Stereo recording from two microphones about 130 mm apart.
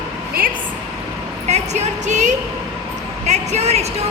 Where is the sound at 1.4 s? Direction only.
60° right (ahead or behind).